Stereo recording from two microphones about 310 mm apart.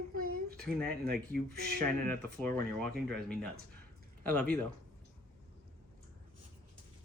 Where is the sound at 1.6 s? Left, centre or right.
Right.